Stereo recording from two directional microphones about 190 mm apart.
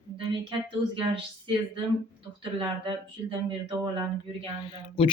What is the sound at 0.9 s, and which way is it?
Speech, 25° right (ahead or behind).